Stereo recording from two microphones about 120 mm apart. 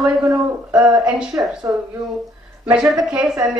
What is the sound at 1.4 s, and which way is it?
Speech, 25° right (ahead or behind).